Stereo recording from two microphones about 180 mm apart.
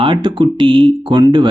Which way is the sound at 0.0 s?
25° right (ahead or behind).